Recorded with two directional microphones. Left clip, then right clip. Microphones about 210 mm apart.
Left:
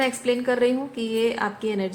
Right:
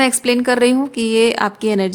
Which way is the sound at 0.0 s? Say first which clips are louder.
Right 7 dB; 60° right (ahead or behind).